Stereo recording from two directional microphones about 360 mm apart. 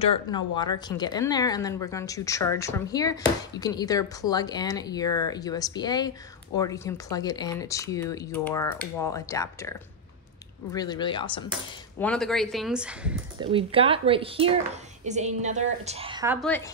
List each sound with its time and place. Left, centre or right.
0.0 s speech: centre
12.0 s speech: centre
13.5 s a woman's voice: centre
16.3 s speech: centre